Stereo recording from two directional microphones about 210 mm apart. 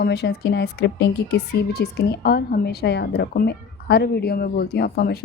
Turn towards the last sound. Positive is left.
turn(degrees=50)  # may be behind; listen again after turning